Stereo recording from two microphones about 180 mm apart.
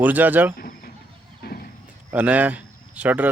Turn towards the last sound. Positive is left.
turn(degrees=-10)  # may be behind; listen again after turning